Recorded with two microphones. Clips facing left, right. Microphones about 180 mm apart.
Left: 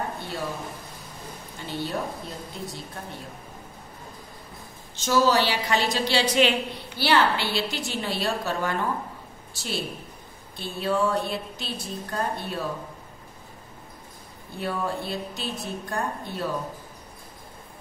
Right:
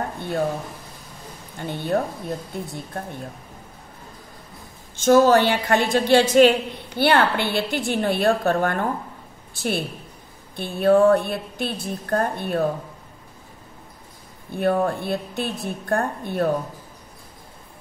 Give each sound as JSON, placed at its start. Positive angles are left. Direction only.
{"t": 1.6, "sound": "a woman's voice", "side_deg": -55}
{"t": 4.9, "sound": "a woman's voice", "side_deg": -50}
{"t": 14.5, "sound": "a woman's voice", "side_deg": -55}